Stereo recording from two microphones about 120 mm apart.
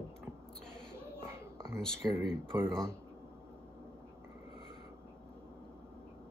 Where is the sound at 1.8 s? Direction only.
5° left (ahead or behind).